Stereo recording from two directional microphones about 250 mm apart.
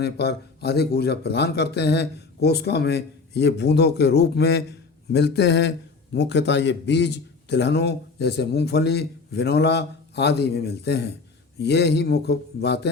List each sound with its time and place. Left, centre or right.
0.0 s a man's voice: left